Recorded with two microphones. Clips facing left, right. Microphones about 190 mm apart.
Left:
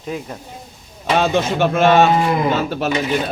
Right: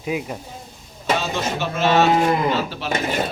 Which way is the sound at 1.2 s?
60° left (ahead or behind).